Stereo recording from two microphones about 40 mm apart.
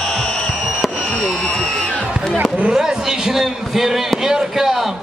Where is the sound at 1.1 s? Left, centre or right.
Left.